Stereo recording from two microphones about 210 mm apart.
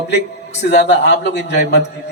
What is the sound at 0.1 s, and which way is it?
A man's voice, 55° left (ahead or behind).